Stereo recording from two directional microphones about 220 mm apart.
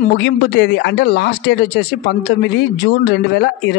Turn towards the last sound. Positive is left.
turn(degrees=50)  # may be behind; listen again after turning